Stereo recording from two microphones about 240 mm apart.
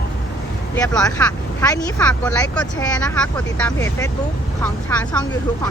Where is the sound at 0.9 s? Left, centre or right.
Centre.